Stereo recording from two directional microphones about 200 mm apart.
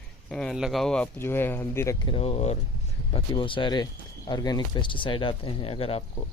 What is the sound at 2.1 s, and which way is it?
Speech, 30° left (ahead or behind).